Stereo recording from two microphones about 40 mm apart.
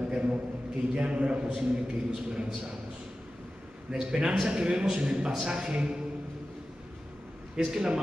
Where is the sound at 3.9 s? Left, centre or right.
Right.